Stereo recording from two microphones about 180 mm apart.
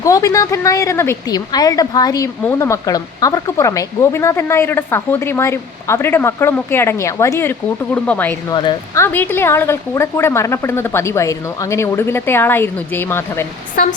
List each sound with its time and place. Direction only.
0.0 s a woman's voice: 20° left (ahead or behind)
8.5 s a woman's voice: 25° left (ahead or behind)
9.1 s a woman's voice: 10° left (ahead or behind)